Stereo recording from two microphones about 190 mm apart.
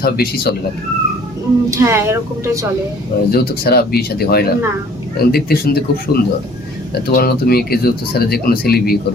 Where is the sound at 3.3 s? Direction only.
55° left (ahead or behind).